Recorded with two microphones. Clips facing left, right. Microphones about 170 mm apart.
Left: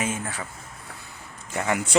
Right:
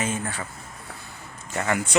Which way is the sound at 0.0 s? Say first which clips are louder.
Right 1 dB; 10° left (ahead or behind).